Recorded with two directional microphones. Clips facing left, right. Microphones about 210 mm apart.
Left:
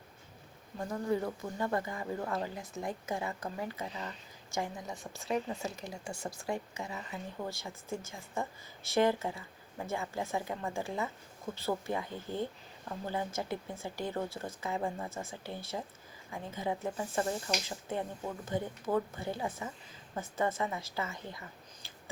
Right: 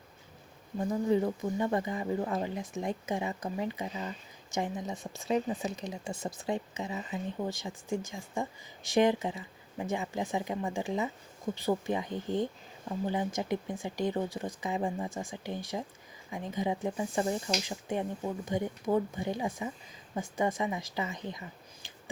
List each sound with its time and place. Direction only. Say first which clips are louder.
0.8 s speech: right 5 dB; 15° right (ahead or behind)